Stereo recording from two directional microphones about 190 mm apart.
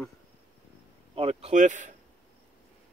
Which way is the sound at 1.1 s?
30° right (ahead or behind).